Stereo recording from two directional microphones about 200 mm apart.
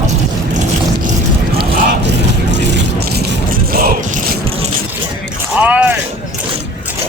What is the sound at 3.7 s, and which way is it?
Boat, 50° right (ahead or behind).